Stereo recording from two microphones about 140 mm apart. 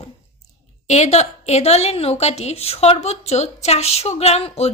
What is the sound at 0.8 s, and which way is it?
Speech, 55° left (ahead or behind).